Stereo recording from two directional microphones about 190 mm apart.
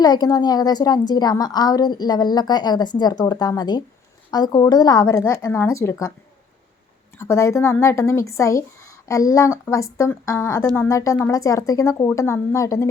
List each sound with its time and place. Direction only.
0.0 s a woman's voice: 20° left (ahead or behind)
7.2 s speech: 15° left (ahead or behind)